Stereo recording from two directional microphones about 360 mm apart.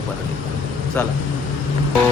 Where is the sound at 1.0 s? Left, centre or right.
Centre.